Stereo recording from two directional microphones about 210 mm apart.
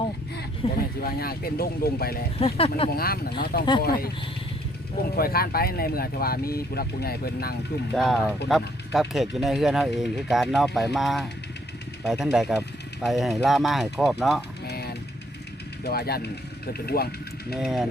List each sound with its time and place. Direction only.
0.3 s speech: 45° left (ahead or behind)
2.4 s speech: 25° left (ahead or behind)
2.9 s speech: 45° left (ahead or behind)
5.1 s speech: 45° left (ahead or behind)
7.9 s speech: centre (ahead or behind)
14.7 s vehicle: 50° left (ahead or behind)
15.8 s speech: 50° left (ahead or behind)
17.5 s speech: centre (ahead or behind)